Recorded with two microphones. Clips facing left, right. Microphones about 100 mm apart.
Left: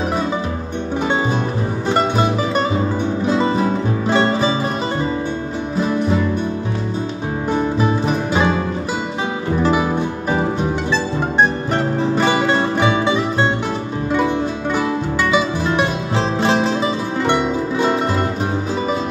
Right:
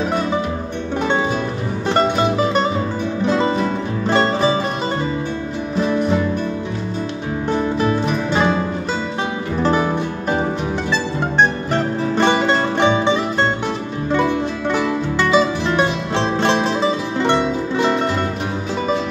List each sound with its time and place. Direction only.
1.9 s music: 5° left (ahead or behind)
3.6 s music: 10° left (ahead or behind)
9.6 s music: 10° left (ahead or behind)
12.2 s music: 5° left (ahead or behind)
15.3 s music: 5° left (ahead or behind)